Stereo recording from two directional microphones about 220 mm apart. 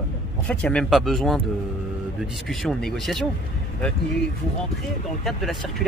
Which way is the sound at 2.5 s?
Centre (ahead or behind).